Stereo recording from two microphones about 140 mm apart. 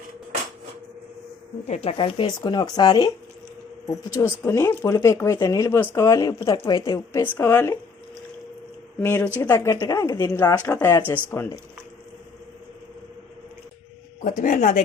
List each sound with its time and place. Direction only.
1.6 s speech: 45° left (ahead or behind); by 7.3 s 25° left (ahead or behind)
7.3 s speech: 15° left (ahead or behind)
9.0 s speech: 15° left (ahead or behind)
14.2 s speech: 65° left (ahead or behind)